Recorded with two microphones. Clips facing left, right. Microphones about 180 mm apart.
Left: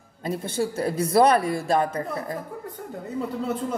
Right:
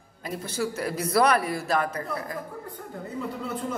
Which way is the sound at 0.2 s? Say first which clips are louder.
Left 4 dB; 30° left (ahead or behind).